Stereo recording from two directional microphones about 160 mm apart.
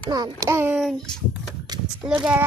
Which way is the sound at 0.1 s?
25° right (ahead or behind).